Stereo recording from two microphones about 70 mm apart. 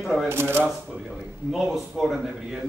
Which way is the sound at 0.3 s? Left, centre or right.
Right.